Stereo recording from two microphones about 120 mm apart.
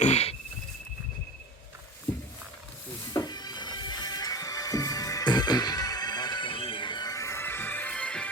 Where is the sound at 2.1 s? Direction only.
15° left (ahead or behind).